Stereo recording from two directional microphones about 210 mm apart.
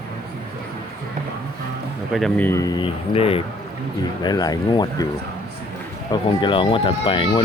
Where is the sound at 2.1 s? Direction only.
5° left (ahead or behind).